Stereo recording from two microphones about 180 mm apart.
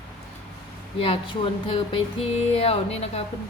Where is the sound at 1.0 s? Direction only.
30° left (ahead or behind).